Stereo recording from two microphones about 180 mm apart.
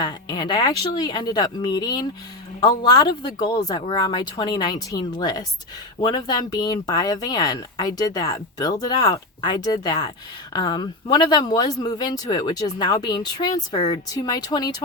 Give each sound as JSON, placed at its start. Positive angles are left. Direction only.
{"t": 0.0, "sound": "speech", "side_deg": 25}